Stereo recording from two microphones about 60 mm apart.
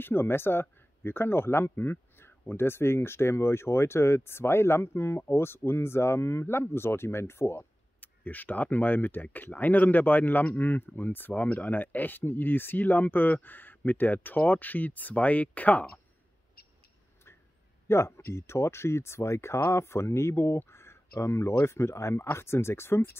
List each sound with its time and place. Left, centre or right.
0.0 s speech: left
8.0 s speech: left
17.8 s speech: left